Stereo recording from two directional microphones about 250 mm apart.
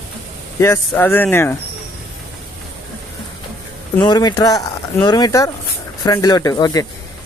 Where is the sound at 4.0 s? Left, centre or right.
Centre.